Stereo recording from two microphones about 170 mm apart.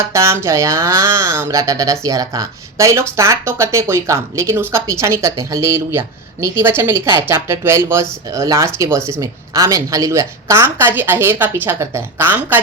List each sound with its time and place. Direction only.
0.1 s speech: 15° right (ahead or behind)